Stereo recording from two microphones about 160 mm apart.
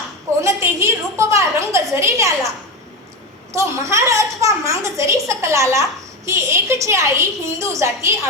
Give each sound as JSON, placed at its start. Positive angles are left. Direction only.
{"t": 0.4, "sound": "a woman's voice", "side_deg": -20}
{"t": 3.5, "sound": "a woman's voice", "side_deg": -20}